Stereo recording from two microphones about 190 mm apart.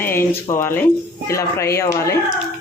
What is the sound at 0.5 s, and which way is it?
A woman's voice, 10° left (ahead or behind).